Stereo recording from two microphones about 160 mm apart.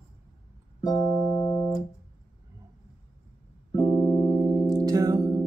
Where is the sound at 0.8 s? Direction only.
25° left (ahead or behind).